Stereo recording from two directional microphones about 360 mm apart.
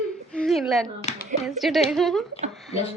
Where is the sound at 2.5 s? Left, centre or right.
Centre.